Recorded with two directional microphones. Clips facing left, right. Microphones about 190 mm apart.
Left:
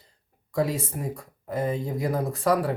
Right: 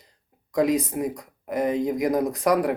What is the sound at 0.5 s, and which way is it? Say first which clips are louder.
Speech: right 5 dB; 15° right (ahead or behind).